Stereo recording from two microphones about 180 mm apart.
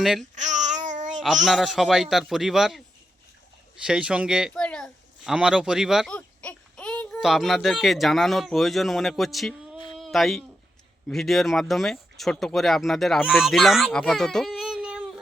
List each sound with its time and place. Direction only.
0.0 s a man's voice: centre (ahead or behind)
0.3 s babbling: 40° right (ahead or behind)
1.5 s a man's voice: centre (ahead or behind)
3.8 s speech: 5° right (ahead or behind)
6.1 s a child's voice: 10° left (ahead or behind)